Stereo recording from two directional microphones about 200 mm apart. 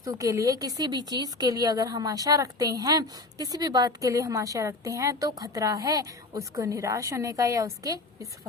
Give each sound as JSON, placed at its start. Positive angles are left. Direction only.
{"t": 0.0, "sound": "speech", "side_deg": -15}